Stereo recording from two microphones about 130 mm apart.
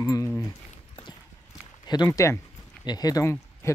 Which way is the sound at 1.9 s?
30° left (ahead or behind).